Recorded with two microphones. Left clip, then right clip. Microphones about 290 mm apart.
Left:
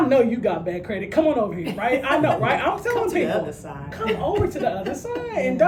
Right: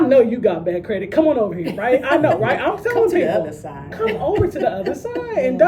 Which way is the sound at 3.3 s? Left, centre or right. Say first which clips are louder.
Right 5 dB; centre.